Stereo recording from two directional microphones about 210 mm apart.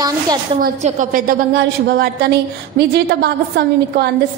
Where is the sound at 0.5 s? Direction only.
40° right (ahead or behind).